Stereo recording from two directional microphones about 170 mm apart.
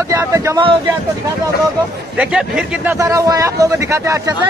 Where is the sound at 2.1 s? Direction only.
5° right (ahead or behind).